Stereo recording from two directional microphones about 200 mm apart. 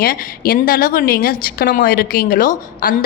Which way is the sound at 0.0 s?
50° left (ahead or behind).